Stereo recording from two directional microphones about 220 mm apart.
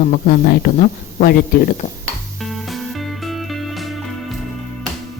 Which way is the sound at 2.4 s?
Centre (ahead or behind).